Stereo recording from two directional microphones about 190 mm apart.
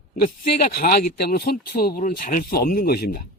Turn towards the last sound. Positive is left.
turn(degrees=50)  # may be behind; listen again after turning